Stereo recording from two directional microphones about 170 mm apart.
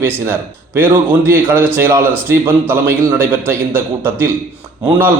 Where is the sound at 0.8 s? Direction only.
10° right (ahead or behind).